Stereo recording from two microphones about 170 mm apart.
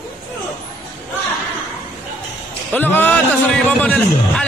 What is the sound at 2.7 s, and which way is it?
A man's voice, 10° left (ahead or behind).